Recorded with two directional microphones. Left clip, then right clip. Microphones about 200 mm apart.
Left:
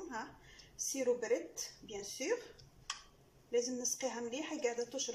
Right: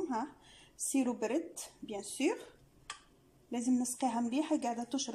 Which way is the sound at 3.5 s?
60° right (ahead or behind).